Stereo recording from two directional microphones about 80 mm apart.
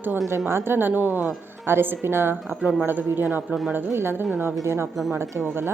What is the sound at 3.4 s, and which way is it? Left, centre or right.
Speech, centre.